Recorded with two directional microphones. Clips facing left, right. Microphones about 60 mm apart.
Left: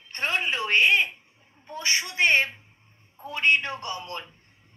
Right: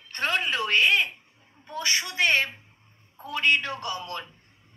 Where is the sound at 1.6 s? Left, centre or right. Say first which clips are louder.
Even; left.